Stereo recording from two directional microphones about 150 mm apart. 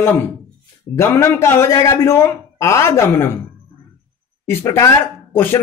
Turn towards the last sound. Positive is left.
turn(degrees=15)  # may be behind; listen again after turning